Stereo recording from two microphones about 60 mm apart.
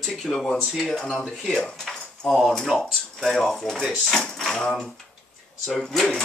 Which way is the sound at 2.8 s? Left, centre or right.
Centre.